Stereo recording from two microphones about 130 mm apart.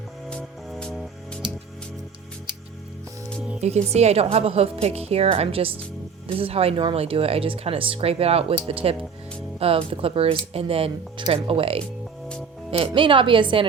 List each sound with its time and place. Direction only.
0.3 s music: 5° left (ahead or behind)
3.6 s a woman's voice: 55° right (ahead or behind); by 13.7 s 40° right (ahead or behind)